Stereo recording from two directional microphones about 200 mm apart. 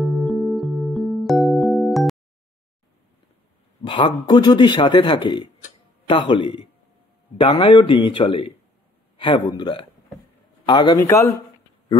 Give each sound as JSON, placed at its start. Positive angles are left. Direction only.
{"t": 0.0, "sound": "music", "side_deg": 0}
{"t": 3.8, "sound": "speech", "side_deg": 25}